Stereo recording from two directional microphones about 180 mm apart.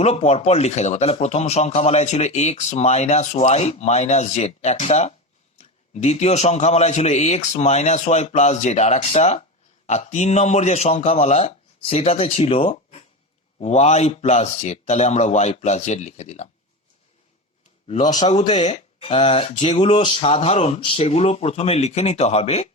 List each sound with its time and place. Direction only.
0.0 s a man's voice: 35° left (ahead or behind)
17.8 s a man's voice: 35° left (ahead or behind)